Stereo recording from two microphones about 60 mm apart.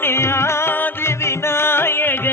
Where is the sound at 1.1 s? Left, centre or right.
Left.